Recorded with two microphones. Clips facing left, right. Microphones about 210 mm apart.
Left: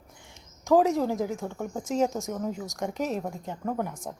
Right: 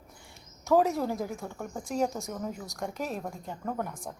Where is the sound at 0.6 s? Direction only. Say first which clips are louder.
Left 3 dB; 15° left (ahead or behind).